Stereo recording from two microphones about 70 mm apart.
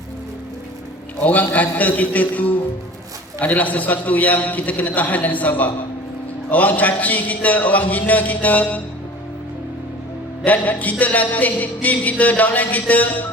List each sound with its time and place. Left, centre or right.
1.2 s music: left
10.4 s music: left